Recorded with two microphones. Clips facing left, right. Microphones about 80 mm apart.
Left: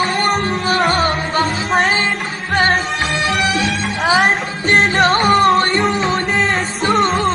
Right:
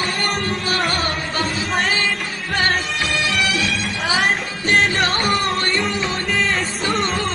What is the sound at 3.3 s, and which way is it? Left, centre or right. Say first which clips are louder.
Music: left 4 dB; left.